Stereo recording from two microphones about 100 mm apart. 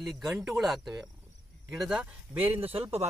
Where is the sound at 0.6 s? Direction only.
Centre (ahead or behind).